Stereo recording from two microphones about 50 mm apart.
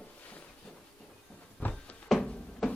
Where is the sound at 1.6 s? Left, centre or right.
Left.